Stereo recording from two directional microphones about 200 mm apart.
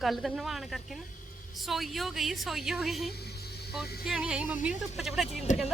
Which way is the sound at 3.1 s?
55° left (ahead or behind).